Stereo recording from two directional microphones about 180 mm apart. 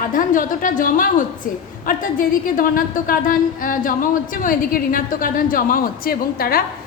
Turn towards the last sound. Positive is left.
turn(degrees=55)  # may be behind; listen again after turning